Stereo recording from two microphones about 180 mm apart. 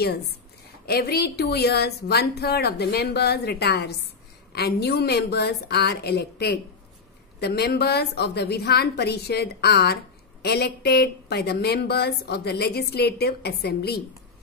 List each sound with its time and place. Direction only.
0.8 s a woman's voice: 60° left (ahead or behind)